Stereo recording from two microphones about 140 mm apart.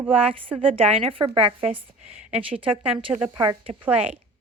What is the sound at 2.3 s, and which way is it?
Speech, 10° right (ahead or behind).